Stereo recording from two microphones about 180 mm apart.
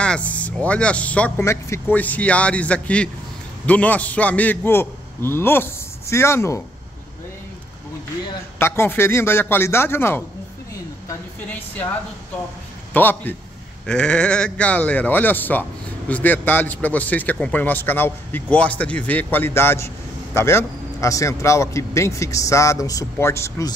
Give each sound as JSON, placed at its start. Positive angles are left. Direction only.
{"t": 0.0, "sound": "a man's voice", "side_deg": 5}
{"t": 8.5, "sound": "a man's voice", "side_deg": 15}
{"t": 12.9, "sound": "a man's voice", "side_deg": 10}